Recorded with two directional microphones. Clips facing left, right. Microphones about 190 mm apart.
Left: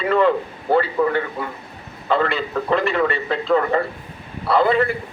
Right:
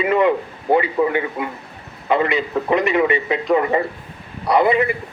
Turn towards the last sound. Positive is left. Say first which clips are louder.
# right 1 dB
turn(degrees=-15)  # may be behind; listen again after turning